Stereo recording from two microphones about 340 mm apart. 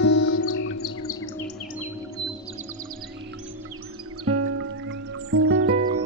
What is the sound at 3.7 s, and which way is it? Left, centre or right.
Music, right.